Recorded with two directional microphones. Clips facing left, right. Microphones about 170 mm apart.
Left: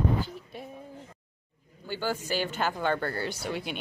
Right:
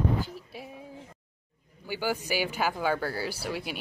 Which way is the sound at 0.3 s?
5° right (ahead or behind).